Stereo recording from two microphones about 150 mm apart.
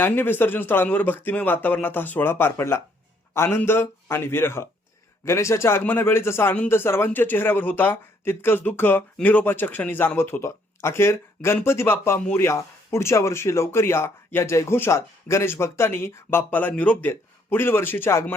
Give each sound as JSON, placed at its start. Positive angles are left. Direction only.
{"t": 0.0, "sound": "a man's voice", "side_deg": 15}